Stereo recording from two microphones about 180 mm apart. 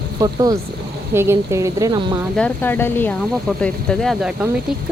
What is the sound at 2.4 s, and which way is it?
Speech, 10° left (ahead or behind).